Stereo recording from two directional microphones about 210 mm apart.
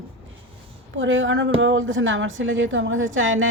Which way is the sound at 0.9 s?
65° right (ahead or behind).